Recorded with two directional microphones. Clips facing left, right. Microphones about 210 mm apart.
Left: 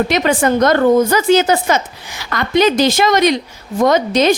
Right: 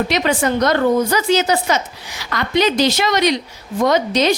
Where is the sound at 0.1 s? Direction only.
50° left (ahead or behind).